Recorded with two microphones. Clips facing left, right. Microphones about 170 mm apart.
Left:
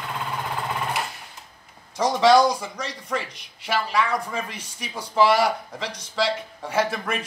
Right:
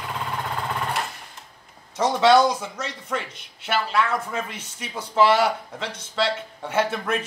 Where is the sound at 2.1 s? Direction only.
5° right (ahead or behind).